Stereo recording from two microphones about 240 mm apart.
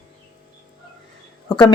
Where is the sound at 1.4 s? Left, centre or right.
Centre.